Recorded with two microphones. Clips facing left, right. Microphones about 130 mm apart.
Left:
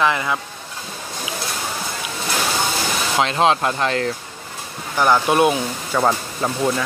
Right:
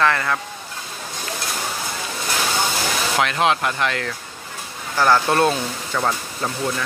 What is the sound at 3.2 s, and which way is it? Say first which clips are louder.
Speech: left 3 dB; 30° left (ahead or behind).